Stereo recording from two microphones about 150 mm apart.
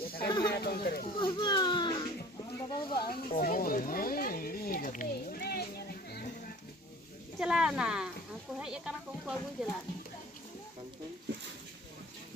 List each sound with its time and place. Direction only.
0.3 s a sound: 30° left (ahead or behind)
0.5 s speech: 90° left
1.2 s baby cry: 30° left (ahead or behind)
2.6 s snake: 30° left (ahead or behind)
3.3 s a sound: 75° left (ahead or behind)
7.3 s speech: 5° right (ahead or behind)